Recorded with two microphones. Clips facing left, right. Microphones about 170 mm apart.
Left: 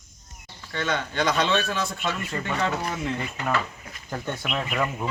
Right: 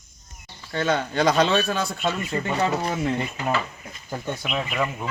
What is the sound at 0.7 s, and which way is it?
A man's voice, 35° right (ahead or behind).